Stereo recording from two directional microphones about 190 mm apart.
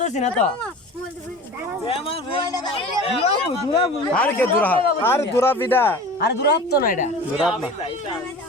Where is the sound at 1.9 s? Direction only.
30° left (ahead or behind).